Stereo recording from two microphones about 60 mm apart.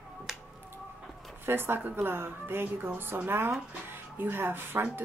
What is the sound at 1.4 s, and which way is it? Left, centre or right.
Speech, right.